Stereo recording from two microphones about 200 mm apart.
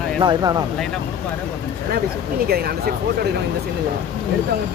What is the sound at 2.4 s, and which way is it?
Speech, 50° right (ahead or behind).